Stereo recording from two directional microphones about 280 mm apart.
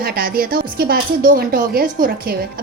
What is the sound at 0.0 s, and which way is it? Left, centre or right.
Speech, right.